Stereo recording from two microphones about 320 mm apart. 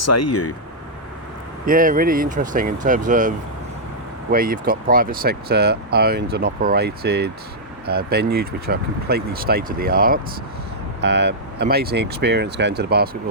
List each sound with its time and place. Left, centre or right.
0.0 s speech: left
1.6 s speech: right